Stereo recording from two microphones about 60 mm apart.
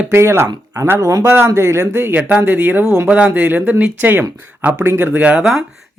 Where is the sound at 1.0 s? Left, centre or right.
Right.